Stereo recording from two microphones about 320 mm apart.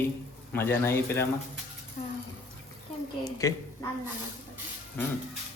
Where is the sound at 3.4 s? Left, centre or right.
Centre.